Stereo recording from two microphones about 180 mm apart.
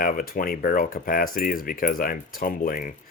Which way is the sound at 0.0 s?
50° left (ahead or behind).